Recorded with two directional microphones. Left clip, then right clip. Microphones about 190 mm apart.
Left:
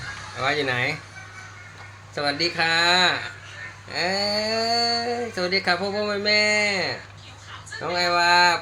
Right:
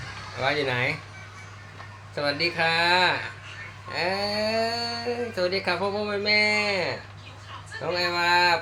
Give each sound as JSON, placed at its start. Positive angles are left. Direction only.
{"t": 0.3, "sound": "speech", "side_deg": 30}
{"t": 2.1, "sound": "speech", "side_deg": 35}
{"t": 7.9, "sound": "speech", "side_deg": 40}